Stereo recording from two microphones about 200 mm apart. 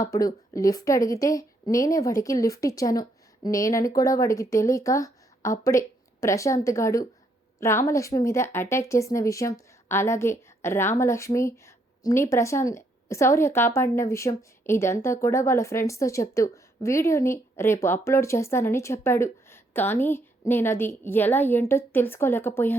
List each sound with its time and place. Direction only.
0.0 s speech: 15° left (ahead or behind)